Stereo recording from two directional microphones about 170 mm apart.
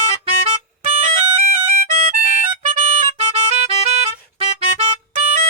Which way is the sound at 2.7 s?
35° right (ahead or behind).